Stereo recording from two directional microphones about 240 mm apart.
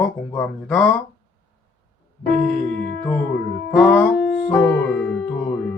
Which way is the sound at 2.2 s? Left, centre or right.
Left.